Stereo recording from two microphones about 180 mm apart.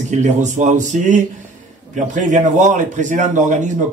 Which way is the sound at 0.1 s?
40° right (ahead or behind).